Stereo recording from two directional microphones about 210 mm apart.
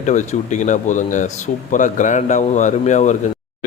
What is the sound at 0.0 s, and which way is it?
Speech, 35° left (ahead or behind).